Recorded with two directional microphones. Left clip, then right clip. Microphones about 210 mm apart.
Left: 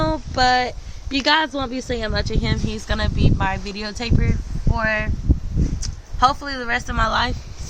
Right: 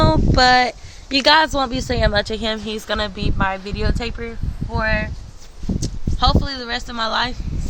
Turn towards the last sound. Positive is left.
turn(degrees=0)  # may be behind; listen again after turning